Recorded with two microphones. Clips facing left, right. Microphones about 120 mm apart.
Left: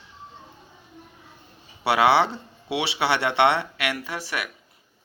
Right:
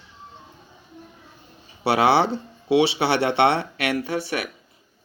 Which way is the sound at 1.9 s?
30° right (ahead or behind).